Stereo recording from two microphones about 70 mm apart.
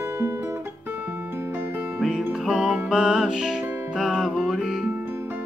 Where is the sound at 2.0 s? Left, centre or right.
Centre.